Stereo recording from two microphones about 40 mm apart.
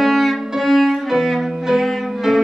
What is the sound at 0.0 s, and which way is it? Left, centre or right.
Music, centre.